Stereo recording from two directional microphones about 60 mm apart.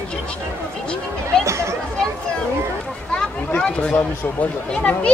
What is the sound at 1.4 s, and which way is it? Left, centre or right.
Speech, right.